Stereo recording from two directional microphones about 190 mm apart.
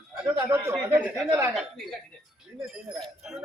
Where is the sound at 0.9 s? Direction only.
10° right (ahead or behind).